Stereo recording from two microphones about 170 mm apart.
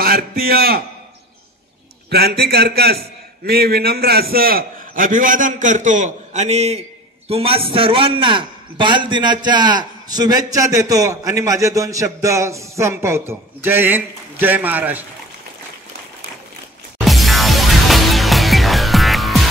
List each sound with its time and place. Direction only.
0.0 s a man's voice: 60° right (ahead or behind)
2.0 s a man's voice: 70° right (ahead or behind); by 15.0 s 10° right (ahead or behind)
17.0 s music: centre (ahead or behind)